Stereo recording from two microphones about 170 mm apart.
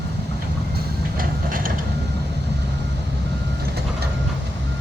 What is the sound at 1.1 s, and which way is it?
Train, 55° right (ahead or behind).